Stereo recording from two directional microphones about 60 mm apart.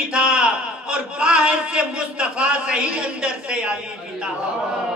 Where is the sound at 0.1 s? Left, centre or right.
Centre.